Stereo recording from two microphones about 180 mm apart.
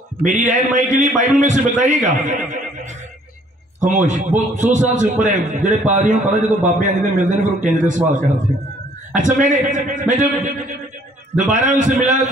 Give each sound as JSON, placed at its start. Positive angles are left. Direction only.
{"t": 0.2, "sound": "a man's voice", "side_deg": -45}